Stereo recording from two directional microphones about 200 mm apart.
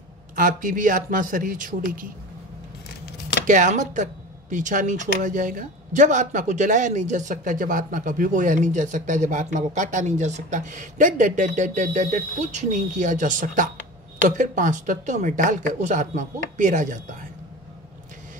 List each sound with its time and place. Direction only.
0.4 s a man's voice: 40° right (ahead or behind)
3.4 s speech: 40° right (ahead or behind)